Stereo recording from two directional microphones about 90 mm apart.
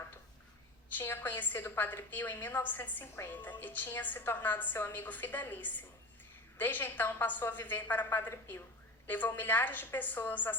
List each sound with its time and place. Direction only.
0.9 s a woman's voice: 25° left (ahead or behind)